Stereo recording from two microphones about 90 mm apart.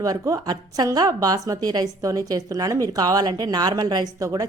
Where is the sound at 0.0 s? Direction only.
40° right (ahead or behind).